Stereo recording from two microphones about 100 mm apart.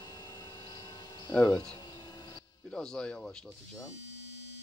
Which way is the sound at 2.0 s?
45° left (ahead or behind).